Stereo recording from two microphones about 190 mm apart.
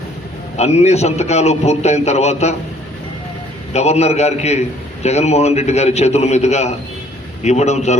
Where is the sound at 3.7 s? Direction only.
35° left (ahead or behind).